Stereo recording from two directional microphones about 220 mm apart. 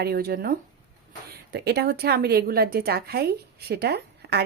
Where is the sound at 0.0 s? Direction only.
45° right (ahead or behind).